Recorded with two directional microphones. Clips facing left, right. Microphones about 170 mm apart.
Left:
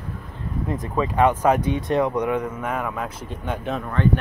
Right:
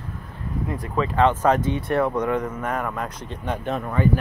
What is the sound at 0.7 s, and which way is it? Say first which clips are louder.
Speech: left 1 dB; 20° left (ahead or behind).